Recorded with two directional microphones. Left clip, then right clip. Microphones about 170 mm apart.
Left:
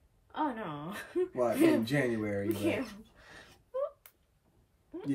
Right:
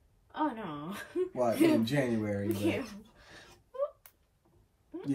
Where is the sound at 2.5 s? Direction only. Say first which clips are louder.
Even; 15° left (ahead or behind).